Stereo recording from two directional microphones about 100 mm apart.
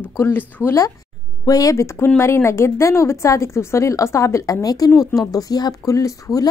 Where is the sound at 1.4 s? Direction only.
35° left (ahead or behind).